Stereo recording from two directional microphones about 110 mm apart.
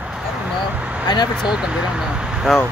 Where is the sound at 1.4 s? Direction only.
10° right (ahead or behind).